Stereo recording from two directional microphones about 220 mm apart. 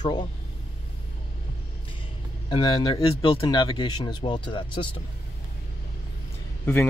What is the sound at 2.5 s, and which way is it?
Speech, 15° left (ahead or behind).